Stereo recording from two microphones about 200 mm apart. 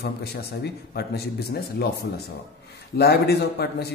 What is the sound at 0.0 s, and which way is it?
Speech, 55° left (ahead or behind).